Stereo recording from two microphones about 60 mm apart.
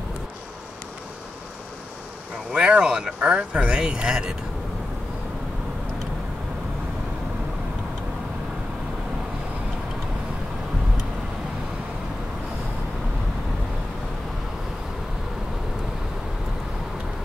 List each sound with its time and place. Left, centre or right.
2.5 s speech: centre